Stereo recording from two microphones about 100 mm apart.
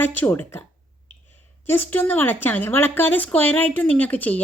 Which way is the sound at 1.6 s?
20° left (ahead or behind).